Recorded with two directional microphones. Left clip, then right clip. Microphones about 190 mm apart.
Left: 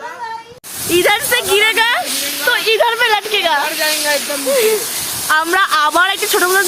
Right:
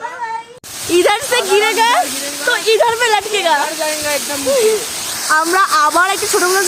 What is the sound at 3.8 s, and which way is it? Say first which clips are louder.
Speech: left 2 dB; 35° right (ahead or behind).